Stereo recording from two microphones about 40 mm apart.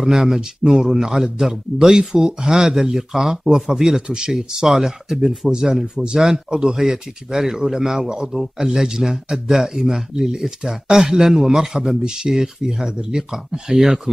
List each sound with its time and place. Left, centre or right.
0.1 s speech: centre